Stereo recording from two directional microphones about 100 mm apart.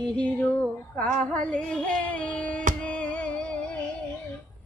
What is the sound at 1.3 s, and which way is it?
Music, 10° left (ahead or behind).